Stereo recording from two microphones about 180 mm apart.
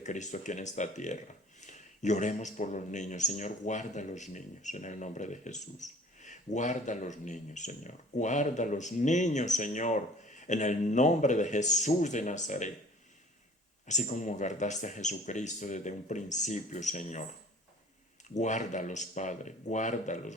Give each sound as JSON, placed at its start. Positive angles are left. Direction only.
{"t": 0.0, "sound": "a man's voice", "side_deg": 40}
{"t": 13.8, "sound": "a man's voice", "side_deg": 40}
{"t": 18.3, "sound": "speech", "side_deg": 40}